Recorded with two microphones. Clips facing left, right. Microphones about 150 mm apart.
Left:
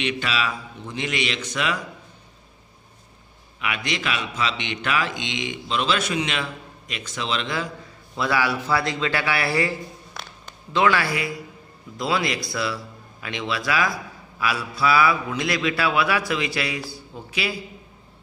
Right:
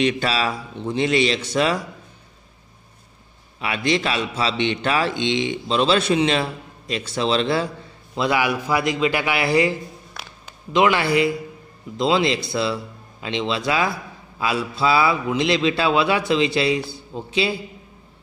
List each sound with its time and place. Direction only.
0.0 s a man's voice: 35° right (ahead or behind)
3.6 s a man's voice: 35° right (ahead or behind)
8.2 s a man's voice: 20° right (ahead or behind)